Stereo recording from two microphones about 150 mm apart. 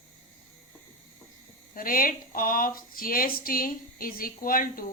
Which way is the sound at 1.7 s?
70° left (ahead or behind).